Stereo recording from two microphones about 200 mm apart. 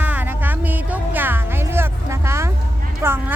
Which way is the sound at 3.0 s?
10° right (ahead or behind).